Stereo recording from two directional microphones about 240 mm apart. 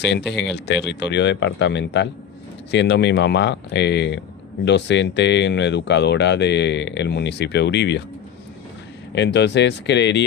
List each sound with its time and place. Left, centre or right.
0.0 s speech: left
9.1 s speech: left